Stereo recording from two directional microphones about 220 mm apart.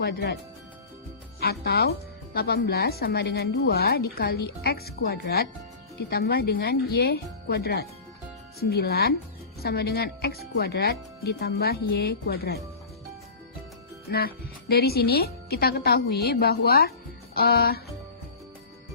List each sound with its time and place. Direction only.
0.0 s speech: 45° left (ahead or behind)
1.4 s speech: 45° left (ahead or behind)
14.1 s speech: 45° left (ahead or behind)